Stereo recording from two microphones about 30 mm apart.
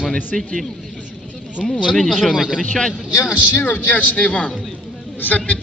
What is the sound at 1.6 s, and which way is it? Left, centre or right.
Speech, centre.